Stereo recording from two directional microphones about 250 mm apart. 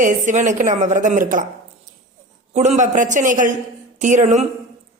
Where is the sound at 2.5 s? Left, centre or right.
Right.